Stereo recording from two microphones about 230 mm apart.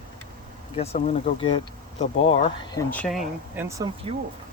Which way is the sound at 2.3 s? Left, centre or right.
Centre.